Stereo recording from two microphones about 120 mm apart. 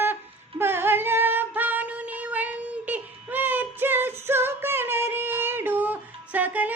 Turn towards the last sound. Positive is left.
turn(degrees=-15)  # may be behind; listen again after turning